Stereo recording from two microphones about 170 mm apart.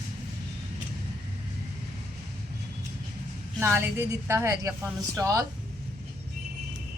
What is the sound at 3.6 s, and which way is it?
A woman's voice, 15° right (ahead or behind).